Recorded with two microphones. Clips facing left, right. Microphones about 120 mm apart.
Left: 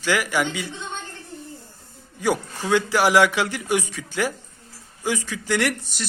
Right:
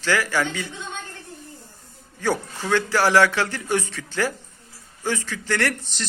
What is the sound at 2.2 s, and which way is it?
A man's voice, 15° left (ahead or behind).